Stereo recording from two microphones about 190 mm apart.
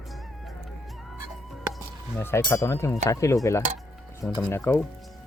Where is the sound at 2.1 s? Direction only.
15° left (ahead or behind).